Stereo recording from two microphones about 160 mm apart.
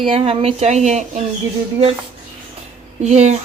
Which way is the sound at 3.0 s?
45° right (ahead or behind).